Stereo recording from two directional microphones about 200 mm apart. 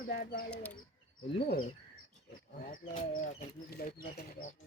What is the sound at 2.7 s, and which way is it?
Speech, 40° left (ahead or behind).